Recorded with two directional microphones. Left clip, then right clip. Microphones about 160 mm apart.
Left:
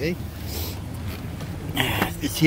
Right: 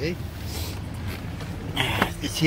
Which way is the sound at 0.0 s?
40° left (ahead or behind).